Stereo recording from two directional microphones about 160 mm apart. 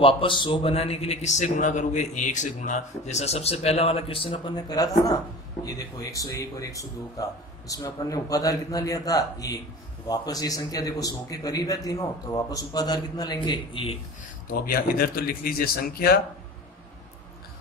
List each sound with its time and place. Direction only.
0.0 s a man's voice: 30° left (ahead or behind)
14.5 s speech: 70° left (ahead or behind)